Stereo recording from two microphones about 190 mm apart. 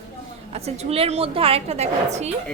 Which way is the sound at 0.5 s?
35° right (ahead or behind).